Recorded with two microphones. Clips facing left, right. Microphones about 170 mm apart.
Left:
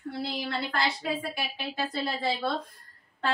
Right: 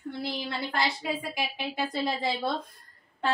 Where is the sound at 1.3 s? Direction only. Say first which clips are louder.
Right 2 dB; 15° right (ahead or behind).